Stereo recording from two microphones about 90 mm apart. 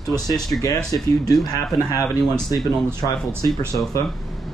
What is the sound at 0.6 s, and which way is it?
Speech, 40° left (ahead or behind).